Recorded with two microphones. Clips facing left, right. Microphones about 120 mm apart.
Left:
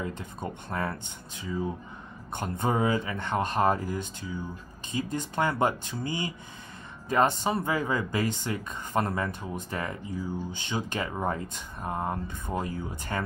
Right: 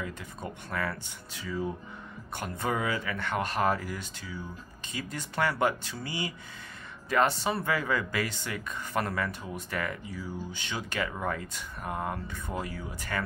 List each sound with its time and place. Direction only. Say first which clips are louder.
0.0 s speech: left 3 dB; 25° left (ahead or behind)